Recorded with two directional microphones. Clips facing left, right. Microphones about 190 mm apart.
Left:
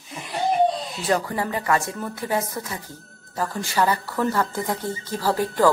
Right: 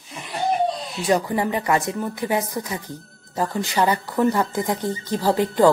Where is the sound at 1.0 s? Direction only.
15° right (ahead or behind).